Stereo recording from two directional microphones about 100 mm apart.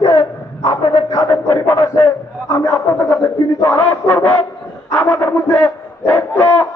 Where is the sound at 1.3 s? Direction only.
25° left (ahead or behind).